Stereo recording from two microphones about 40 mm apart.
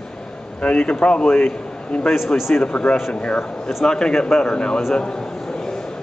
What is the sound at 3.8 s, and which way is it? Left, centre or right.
Speech, centre.